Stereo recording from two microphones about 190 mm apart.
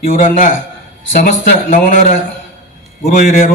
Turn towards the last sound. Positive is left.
turn(degrees=40)  # may be behind; listen again after turning